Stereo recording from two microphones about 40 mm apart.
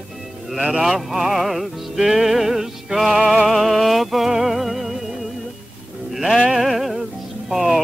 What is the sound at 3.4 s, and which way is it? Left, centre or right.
Music, centre.